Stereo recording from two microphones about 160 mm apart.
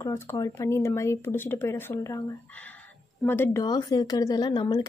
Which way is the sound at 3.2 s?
15° left (ahead or behind).